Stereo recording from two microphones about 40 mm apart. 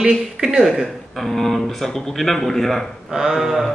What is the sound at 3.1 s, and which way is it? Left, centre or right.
Speech, centre.